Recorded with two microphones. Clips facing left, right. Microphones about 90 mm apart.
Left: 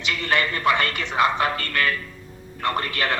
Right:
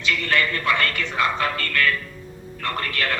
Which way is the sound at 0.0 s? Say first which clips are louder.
Right 1 dB; 20° left (ahead or behind).